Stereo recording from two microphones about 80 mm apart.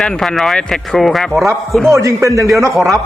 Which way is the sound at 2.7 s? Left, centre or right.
Centre.